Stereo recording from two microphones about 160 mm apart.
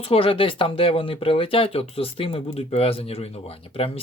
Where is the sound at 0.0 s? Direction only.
35° left (ahead or behind).